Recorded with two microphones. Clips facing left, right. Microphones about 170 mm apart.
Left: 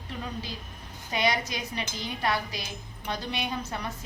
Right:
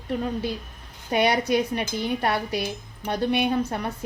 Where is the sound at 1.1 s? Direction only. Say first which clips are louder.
Right 8 dB; 60° right (ahead or behind).